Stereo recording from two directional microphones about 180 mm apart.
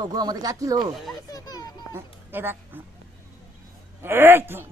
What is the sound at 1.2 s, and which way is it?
Music, 20° left (ahead or behind).